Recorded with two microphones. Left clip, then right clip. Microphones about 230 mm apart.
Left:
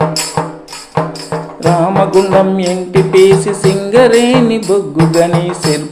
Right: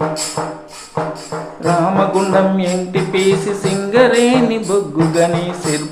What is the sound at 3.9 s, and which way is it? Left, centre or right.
Music, left.